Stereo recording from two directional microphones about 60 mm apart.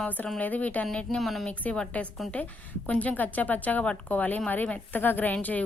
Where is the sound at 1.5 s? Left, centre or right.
Centre.